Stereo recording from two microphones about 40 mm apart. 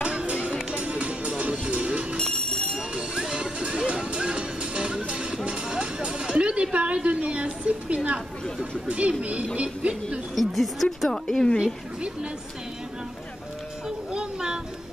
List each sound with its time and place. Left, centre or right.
0.0 s music: right
2.1 s a sound: centre
2.9 s music: right
7.6 s a woman's voice: right
10.3 s a woman's voice: centre
11.1 s a woman's voice: centre
11.6 s a woman's voice: right
13.8 s music: centre